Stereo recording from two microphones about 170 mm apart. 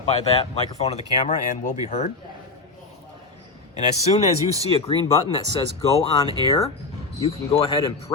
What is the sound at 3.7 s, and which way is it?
Speech, 40° left (ahead or behind).